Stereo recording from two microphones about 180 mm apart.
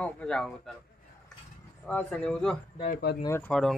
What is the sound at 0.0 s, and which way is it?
Speech, 5° left (ahead or behind).